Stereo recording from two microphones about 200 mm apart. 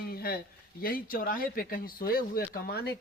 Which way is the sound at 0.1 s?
50° left (ahead or behind).